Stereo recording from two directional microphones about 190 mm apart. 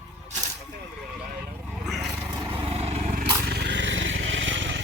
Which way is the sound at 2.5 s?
30° right (ahead or behind).